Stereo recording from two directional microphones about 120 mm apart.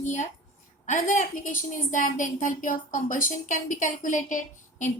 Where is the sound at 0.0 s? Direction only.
85° left.